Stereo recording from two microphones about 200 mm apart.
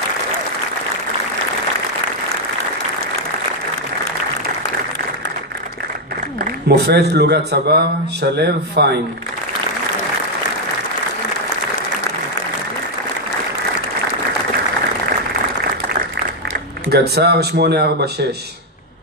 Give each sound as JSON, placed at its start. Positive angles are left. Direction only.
{"t": 6.7, "sound": "a man's voice", "side_deg": -55}
{"t": 16.9, "sound": "speech", "side_deg": -55}